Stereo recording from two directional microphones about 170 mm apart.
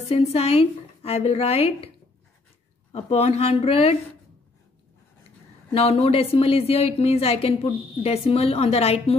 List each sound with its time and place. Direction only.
0.1 s a woman's voice: 40° left (ahead or behind)
2.9 s a woman's voice: 35° left (ahead or behind)
5.7 s a woman's voice: 35° left (ahead or behind)